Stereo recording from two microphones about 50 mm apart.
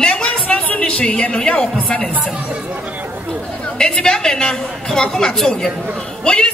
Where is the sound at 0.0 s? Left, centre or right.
Left.